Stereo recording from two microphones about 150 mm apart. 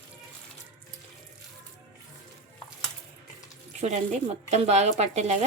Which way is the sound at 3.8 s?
50° right (ahead or behind).